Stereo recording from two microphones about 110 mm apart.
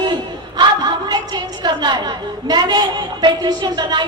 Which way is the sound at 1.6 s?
40° right (ahead or behind).